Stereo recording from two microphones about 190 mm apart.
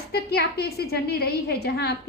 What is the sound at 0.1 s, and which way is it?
A woman's voice, 55° left (ahead or behind).